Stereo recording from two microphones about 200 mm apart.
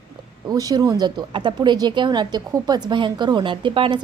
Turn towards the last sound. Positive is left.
turn(degrees=-25)  # may be behind; listen again after turning